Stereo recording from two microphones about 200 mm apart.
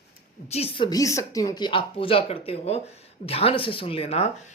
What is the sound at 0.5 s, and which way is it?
A woman's voice, 30° left (ahead or behind).